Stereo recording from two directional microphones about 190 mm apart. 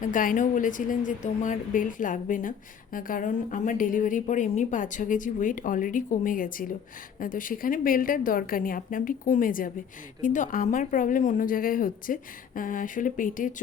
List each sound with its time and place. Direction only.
0.0 s a woman's voice: 45° left (ahead or behind)